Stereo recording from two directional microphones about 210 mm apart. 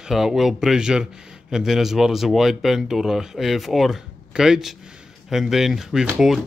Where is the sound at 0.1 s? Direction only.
Centre (ahead or behind).